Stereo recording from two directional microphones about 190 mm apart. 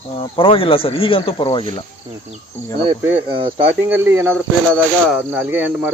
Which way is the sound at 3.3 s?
25° right (ahead or behind).